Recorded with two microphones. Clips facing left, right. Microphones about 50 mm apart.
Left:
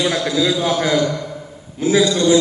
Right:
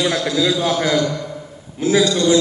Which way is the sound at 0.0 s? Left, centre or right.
Centre.